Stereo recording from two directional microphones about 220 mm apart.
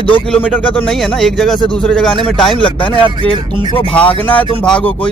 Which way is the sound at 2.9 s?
20° left (ahead or behind).